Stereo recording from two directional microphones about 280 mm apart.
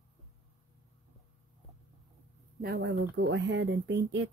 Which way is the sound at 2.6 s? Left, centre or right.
Right.